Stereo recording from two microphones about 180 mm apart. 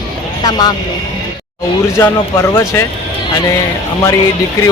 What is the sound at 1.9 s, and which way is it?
Speech, 15° left (ahead or behind).